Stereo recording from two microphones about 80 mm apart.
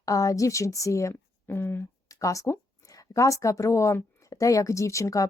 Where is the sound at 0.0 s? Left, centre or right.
Left.